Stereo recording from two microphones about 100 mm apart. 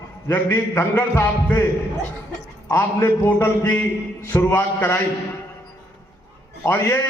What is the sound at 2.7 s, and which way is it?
A man's voice, 25° left (ahead or behind).